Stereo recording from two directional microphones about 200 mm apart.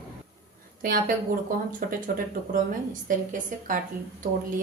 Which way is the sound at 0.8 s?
45° right (ahead or behind).